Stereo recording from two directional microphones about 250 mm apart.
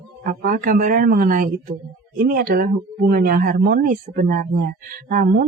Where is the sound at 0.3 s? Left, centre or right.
Right.